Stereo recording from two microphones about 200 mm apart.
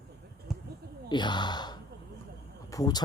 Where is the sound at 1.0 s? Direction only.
20° left (ahead or behind).